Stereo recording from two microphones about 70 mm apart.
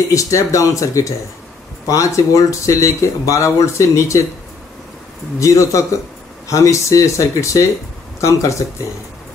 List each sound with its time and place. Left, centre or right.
0.1 s speech: left
5.4 s speech: left